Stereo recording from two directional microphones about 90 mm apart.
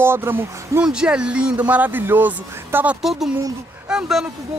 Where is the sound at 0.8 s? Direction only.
10° right (ahead or behind).